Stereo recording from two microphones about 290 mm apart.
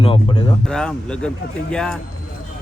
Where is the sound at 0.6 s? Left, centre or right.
Centre.